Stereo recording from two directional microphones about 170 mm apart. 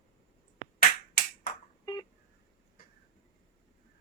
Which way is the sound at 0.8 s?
55° left (ahead or behind).